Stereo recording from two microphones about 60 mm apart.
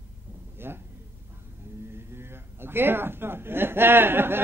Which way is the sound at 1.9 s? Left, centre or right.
Right.